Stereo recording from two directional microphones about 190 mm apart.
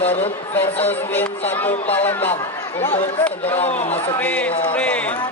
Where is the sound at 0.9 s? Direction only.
10° left (ahead or behind).